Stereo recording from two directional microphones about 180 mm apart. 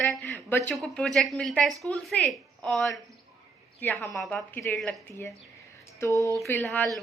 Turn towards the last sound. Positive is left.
turn(degrees=10)  # may be behind; listen again after turning